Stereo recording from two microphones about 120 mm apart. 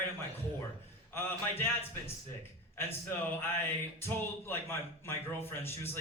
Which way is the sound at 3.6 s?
20° left (ahead or behind).